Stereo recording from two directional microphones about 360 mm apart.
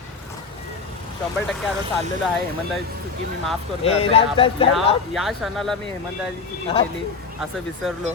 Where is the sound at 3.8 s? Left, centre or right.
Centre.